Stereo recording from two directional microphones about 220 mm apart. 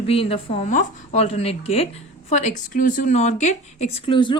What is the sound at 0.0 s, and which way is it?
A woman's voice, 25° left (ahead or behind).